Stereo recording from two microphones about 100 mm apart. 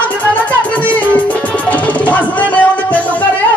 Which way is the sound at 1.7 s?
15° left (ahead or behind).